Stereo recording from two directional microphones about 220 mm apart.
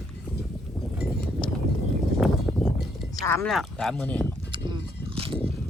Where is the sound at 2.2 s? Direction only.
Centre (ahead or behind).